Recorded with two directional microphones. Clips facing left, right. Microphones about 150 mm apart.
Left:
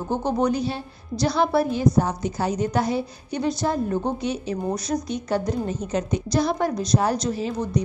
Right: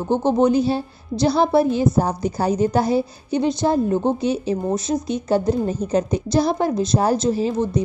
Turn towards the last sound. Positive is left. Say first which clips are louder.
# right 5 dB
turn(degrees=-30)  # may be behind; listen again after turning